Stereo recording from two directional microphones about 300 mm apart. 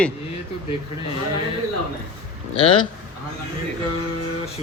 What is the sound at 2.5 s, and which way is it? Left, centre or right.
Speech, centre.